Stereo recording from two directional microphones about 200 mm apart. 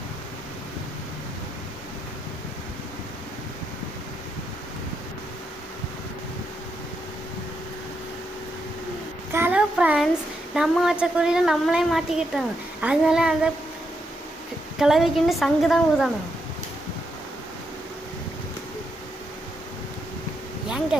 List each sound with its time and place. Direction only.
9.3 s a sound: 10° right (ahead or behind)
10.5 s a woman's voice: 5° right (ahead or behind)
14.8 s a woman's voice: centre (ahead or behind)